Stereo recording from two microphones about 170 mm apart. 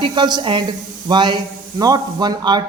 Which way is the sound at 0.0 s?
25° right (ahead or behind).